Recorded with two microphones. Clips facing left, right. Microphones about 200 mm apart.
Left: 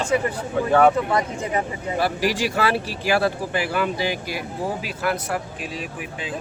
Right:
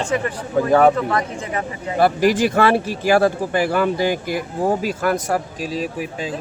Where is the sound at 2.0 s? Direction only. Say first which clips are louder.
Right 7 dB; 50° right (ahead or behind).